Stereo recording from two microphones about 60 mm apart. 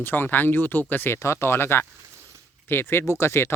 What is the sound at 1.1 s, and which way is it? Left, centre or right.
Speech, left.